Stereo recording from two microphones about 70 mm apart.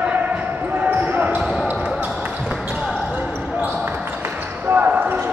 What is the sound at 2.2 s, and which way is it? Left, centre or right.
Basketball bounce, centre.